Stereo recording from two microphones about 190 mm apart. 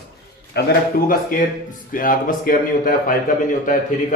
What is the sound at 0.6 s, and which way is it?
Speech, 60° left (ahead or behind).